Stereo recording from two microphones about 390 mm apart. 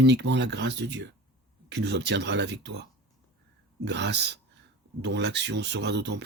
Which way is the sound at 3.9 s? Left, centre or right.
Right.